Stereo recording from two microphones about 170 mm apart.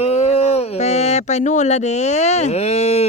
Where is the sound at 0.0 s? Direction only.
40° left (ahead or behind).